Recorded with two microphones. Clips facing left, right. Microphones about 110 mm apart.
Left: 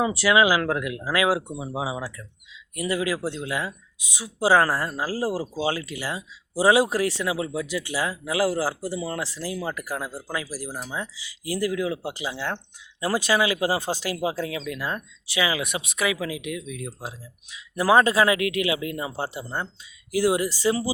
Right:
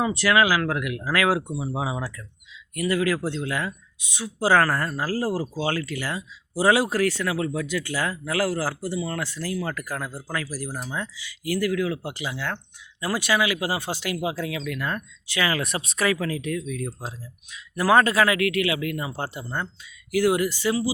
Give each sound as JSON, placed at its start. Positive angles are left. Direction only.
{"t": 0.0, "sound": "speech", "side_deg": 10}
{"t": 0.6, "sound": "speech", "side_deg": 30}